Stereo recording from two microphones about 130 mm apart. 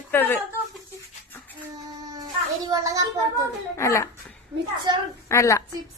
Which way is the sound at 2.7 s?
25° right (ahead or behind).